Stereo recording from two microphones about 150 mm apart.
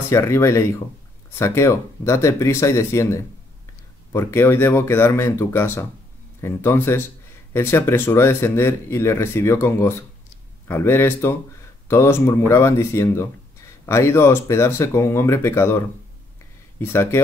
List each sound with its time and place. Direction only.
0.1 s speech: 20° left (ahead or behind)
16.8 s speech: 15° left (ahead or behind)